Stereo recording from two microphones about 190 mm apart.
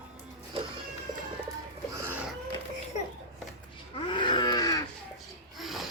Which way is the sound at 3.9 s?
25° left (ahead or behind).